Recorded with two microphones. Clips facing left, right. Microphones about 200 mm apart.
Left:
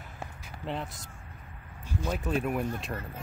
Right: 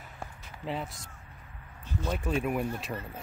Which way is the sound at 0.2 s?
Centre (ahead or behind).